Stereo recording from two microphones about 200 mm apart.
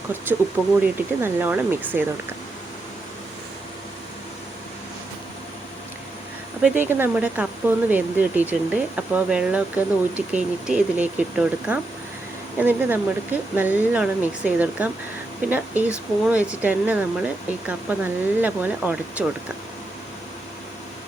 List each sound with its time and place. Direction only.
0.3 s speech: 10° right (ahead or behind)
6.6 s speech: 5° right (ahead or behind)